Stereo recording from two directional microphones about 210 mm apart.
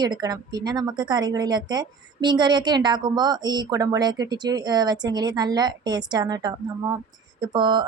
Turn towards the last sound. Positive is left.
turn(degrees=-20)  # may be behind; listen again after turning